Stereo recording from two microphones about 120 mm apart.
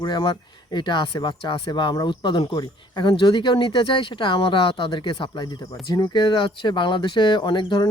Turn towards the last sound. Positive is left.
turn(degrees=40)  # may be behind; listen again after turning